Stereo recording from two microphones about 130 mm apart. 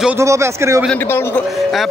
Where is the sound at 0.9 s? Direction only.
15° left (ahead or behind).